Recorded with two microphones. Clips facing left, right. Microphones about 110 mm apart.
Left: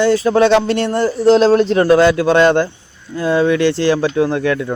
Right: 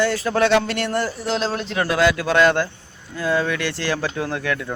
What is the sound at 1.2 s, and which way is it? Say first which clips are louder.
A man's voice: left 13 dB; 40° left (ahead or behind).